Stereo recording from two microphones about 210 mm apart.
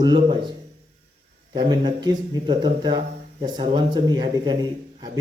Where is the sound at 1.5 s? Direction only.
20° right (ahead or behind).